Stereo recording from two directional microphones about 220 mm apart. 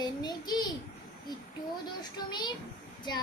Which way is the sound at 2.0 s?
20° left (ahead or behind).